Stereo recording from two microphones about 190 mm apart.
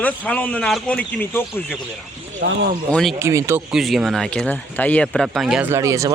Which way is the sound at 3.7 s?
Centre (ahead or behind).